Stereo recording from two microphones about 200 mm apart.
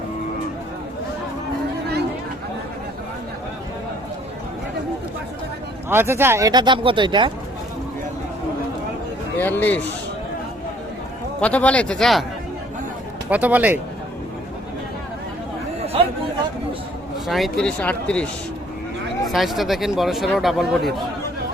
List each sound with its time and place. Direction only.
5.9 s speech: 10° right (ahead or behind)
9.4 s speech: 10° left (ahead or behind)
11.3 s speech: 5° left (ahead or behind)
13.3 s speech: 10° right (ahead or behind)
17.2 s speech: centre (ahead or behind)